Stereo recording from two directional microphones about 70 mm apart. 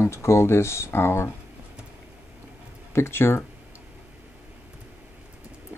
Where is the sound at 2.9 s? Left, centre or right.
Left.